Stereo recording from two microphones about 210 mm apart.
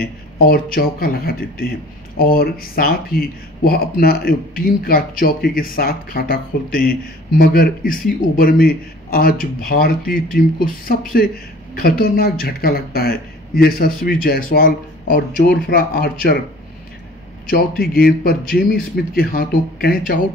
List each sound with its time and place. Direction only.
0.0 s speech: 45° left (ahead or behind)
17.5 s speech: 45° left (ahead or behind)